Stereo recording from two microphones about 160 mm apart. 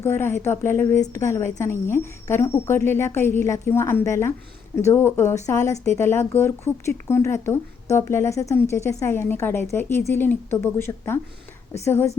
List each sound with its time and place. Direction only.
0.0 s a woman's voice: 15° left (ahead or behind)